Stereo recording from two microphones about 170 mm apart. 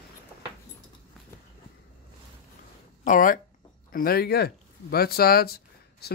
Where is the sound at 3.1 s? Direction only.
55° left (ahead or behind).